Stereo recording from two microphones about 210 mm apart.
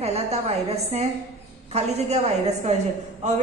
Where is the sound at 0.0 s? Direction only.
30° right (ahead or behind).